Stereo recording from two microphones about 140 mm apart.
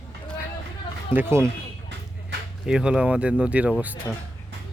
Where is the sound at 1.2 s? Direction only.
20° right (ahead or behind).